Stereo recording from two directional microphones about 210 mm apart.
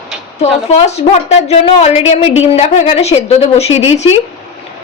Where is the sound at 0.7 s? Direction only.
30° left (ahead or behind).